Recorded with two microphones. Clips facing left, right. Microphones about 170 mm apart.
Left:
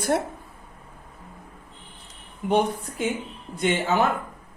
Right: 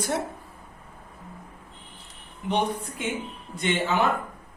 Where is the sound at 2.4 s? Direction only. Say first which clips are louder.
Left 5 dB; 45° left (ahead or behind).